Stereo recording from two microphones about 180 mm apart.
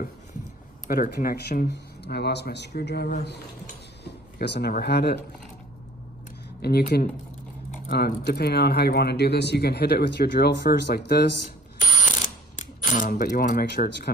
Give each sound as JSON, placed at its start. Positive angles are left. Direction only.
{"t": 0.8, "sound": "speech", "side_deg": 55}
{"t": 6.6, "sound": "speech", "side_deg": 60}
{"t": 11.8, "sound": "coin", "side_deg": 45}